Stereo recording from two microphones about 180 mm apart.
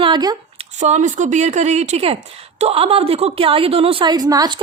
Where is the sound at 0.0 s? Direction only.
25° right (ahead or behind).